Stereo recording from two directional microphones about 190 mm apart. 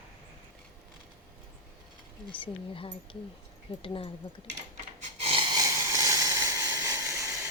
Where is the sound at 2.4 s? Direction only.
25° left (ahead or behind).